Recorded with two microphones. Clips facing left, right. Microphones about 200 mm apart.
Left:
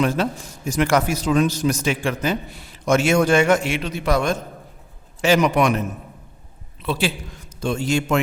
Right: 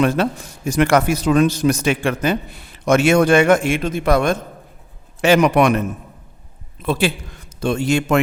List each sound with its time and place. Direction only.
0.0 s a man's voice: 60° right (ahead or behind)
6.8 s a man's voice: 50° right (ahead or behind)
7.6 s a man's voice: 65° right (ahead or behind)